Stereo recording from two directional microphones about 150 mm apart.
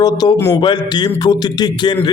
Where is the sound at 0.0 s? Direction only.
25° left (ahead or behind).